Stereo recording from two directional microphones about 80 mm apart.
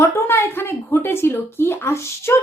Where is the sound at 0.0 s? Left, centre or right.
Left.